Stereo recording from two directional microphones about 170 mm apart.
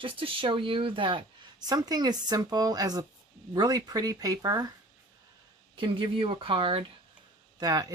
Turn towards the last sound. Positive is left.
turn(degrees=-20)  # may be behind; listen again after turning